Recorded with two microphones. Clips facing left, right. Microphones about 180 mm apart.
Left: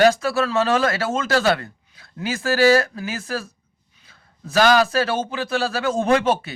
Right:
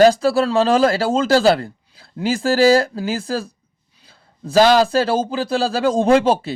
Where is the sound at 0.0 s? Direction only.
35° right (ahead or behind).